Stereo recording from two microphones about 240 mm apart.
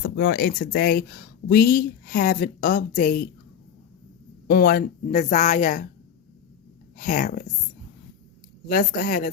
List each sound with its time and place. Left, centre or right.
0.2 s speech: left
4.4 s speech: left
6.9 s speech: left
8.6 s speech: left